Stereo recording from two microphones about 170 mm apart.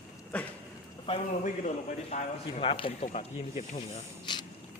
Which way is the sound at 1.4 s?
45° left (ahead or behind).